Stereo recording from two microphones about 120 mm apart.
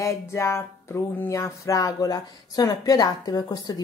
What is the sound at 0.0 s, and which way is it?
Music, 25° left (ahead or behind).